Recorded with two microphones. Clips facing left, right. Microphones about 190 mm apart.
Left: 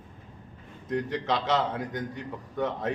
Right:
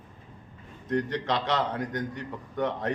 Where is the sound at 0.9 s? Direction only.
Centre (ahead or behind).